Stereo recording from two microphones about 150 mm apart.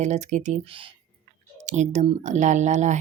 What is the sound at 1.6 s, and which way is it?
Speech, 50° right (ahead or behind).